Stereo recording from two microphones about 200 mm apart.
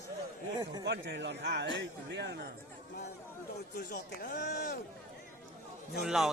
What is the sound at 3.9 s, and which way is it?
Speech, 45° left (ahead or behind).